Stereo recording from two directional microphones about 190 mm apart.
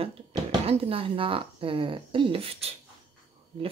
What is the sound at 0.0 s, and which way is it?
A woman's voice, 30° right (ahead or behind).